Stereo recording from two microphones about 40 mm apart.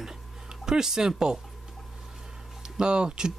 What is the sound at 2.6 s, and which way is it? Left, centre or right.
Speech, right.